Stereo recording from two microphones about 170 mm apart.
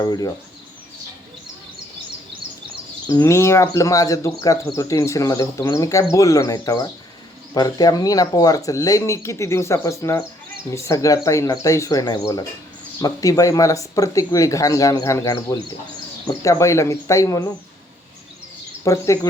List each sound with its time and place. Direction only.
0.0 s speech: 25° left (ahead or behind)
3.1 s speech: 20° left (ahead or behind)
18.9 s speech: 20° left (ahead or behind)